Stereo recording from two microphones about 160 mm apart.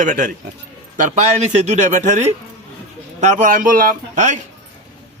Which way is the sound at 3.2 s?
50° right (ahead or behind).